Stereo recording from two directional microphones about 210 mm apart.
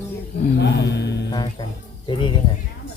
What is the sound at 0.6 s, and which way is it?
Speech, 55° left (ahead or behind).